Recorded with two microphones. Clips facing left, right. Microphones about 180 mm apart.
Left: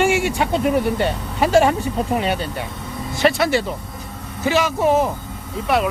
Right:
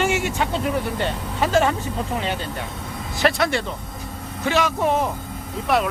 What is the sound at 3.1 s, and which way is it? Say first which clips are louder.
A man's voice: left 3 dB; centre (ahead or behind).